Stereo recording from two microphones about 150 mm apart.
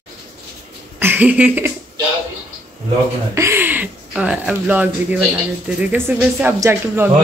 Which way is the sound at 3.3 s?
15° right (ahead or behind).